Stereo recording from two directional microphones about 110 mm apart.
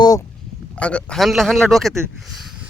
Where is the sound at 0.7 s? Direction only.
10° left (ahead or behind).